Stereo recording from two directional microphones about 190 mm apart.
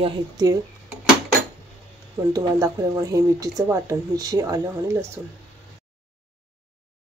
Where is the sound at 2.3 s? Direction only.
20° right (ahead or behind).